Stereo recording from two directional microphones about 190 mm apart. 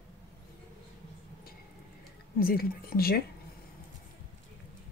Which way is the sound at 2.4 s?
50° left (ahead or behind).